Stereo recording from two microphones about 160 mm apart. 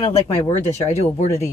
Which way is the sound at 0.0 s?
45° left (ahead or behind).